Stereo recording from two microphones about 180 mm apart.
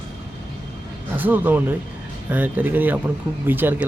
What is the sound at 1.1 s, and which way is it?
Speech, 10° right (ahead or behind).